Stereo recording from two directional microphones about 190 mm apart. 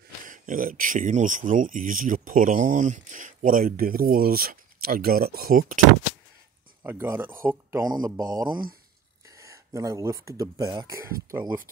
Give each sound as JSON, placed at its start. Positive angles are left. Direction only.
{"t": 0.2, "sound": "speech", "side_deg": -45}
{"t": 6.8, "sound": "speech", "side_deg": -10}